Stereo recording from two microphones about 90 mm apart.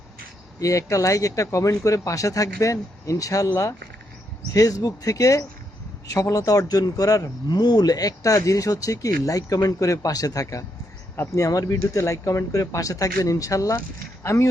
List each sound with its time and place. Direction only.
0.6 s speech: 40° left (ahead or behind)